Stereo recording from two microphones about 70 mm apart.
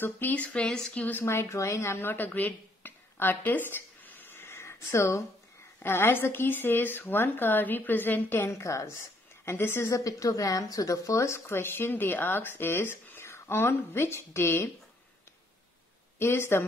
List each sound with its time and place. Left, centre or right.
0.0 s speech: left
1.2 s speech: left
8.5 s a woman's voice: left
9.8 s speech: left
16.2 s speech: left